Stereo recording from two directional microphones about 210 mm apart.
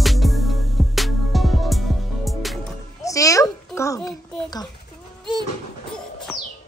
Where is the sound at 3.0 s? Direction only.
15° left (ahead or behind).